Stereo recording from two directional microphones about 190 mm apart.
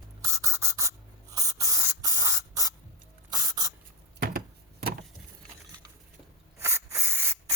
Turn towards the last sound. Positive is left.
turn(degrees=-15)  # may be behind; listen again after turning